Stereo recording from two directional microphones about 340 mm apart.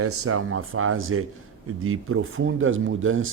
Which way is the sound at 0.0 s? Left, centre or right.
Right.